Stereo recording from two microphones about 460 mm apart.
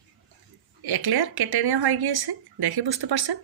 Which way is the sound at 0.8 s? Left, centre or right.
Right.